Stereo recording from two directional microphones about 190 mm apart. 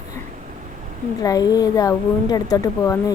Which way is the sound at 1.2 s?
20° left (ahead or behind).